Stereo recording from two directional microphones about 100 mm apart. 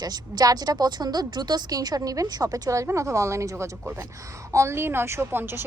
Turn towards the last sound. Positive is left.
turn(degrees=-25)  # may be behind; listen again after turning